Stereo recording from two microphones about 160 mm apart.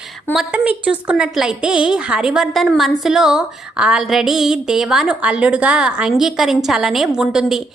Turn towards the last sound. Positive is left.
turn(degrees=-5)  # may be behind; listen again after turning